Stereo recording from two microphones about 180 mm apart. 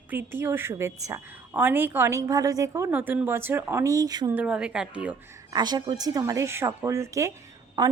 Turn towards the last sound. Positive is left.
turn(degrees=-25)  # may be behind; listen again after turning